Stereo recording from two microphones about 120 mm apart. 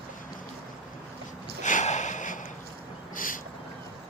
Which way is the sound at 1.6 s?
85° left.